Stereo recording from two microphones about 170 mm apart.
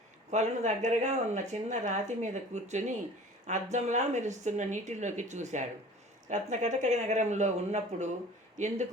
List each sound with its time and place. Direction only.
0.3 s speech: 45° right (ahead or behind)